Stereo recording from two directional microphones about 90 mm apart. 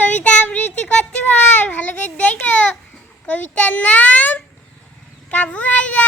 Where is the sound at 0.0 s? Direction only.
20° left (ahead or behind).